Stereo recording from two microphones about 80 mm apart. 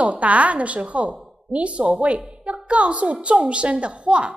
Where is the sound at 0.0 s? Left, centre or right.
Centre.